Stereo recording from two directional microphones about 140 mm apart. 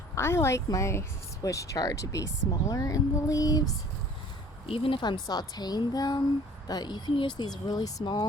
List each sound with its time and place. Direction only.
0.2 s speech: 20° left (ahead or behind)
4.7 s speech: 40° left (ahead or behind)